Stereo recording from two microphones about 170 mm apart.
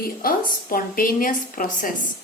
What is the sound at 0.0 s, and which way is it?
A woman's voice, 60° left (ahead or behind).